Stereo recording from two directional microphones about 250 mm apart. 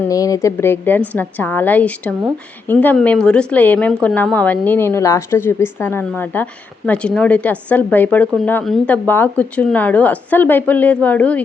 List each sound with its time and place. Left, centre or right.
0.1 s speech: centre